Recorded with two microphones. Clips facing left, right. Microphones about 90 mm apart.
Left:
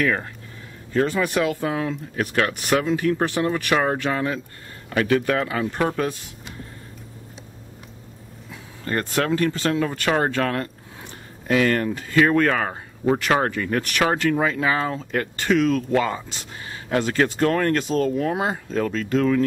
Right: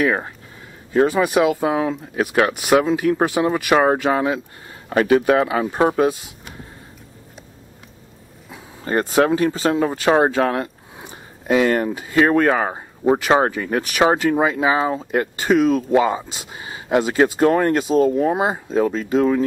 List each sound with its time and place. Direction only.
0.0 s speech: 15° right (ahead or behind)
3.7 s speech: 25° right (ahead or behind)
4.0 s speech: 15° right (ahead or behind)
8.5 s speech: 20° right (ahead or behind)